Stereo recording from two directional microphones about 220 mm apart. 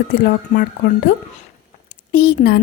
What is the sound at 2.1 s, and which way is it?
Speech, 45° left (ahead or behind).